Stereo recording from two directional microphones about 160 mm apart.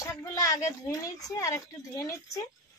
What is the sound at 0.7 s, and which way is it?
Speech, 20° left (ahead or behind).